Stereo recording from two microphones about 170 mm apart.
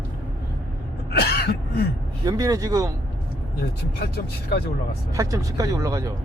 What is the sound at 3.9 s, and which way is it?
Speech, 70° left (ahead or behind).